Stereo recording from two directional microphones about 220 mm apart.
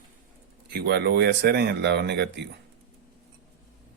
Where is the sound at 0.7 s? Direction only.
50° right (ahead or behind).